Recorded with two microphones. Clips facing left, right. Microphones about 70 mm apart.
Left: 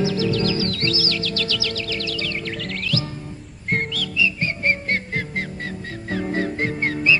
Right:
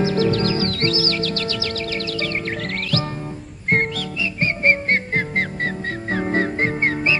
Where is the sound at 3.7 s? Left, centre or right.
Right.